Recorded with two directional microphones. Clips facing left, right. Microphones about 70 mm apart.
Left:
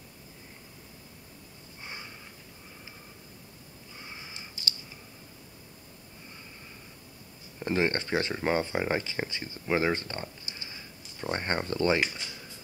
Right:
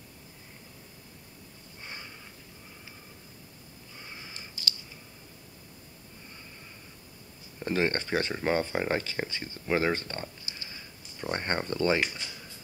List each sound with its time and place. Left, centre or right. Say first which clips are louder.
1.8 s sniff: left 1 dB; centre
4.0 s sniff: even; centre
7.6 s speech: even; centre
8.3 s speech: even; centre
9.9 s speech: even; centre
10.6 s a sound: left 1 dB; centre
11.8 s speech: even; centre